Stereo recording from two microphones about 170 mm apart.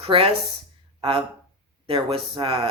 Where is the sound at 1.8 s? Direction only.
30° right (ahead or behind).